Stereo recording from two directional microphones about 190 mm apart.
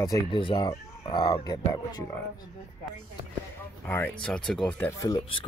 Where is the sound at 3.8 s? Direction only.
10° left (ahead or behind).